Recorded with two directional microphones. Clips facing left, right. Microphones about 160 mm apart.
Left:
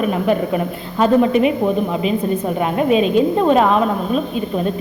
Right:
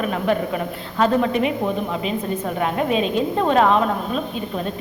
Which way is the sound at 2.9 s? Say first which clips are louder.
Left 6 dB; 5° left (ahead or behind).